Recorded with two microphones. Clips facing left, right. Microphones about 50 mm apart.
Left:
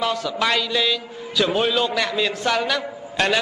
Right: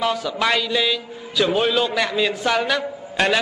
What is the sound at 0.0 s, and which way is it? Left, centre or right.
A man's voice, centre.